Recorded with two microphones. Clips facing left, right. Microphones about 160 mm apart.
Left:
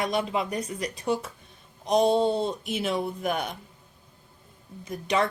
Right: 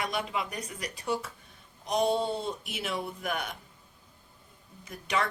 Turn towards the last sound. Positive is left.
turn(degrees=25)  # may be behind; listen again after turning